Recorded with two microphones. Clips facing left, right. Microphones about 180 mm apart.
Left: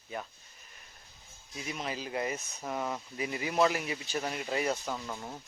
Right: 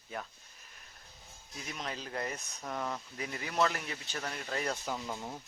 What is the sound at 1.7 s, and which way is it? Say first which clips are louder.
Speech: left 4 dB; 5° left (ahead or behind).